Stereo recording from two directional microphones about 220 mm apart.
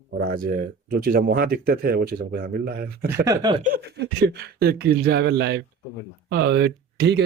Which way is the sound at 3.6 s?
40° right (ahead or behind).